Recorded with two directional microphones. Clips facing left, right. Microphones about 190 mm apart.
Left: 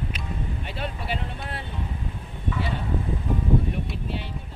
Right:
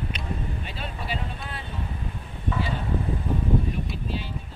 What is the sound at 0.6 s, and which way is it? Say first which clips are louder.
Vehicle: left 3 dB; 65° left (ahead or behind).